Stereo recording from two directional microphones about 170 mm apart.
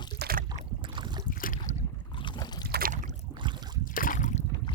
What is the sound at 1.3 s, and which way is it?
Boat, 55° left (ahead or behind).